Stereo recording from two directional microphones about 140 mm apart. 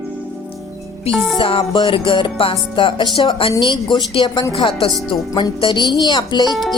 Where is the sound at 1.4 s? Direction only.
40° left (ahead or behind).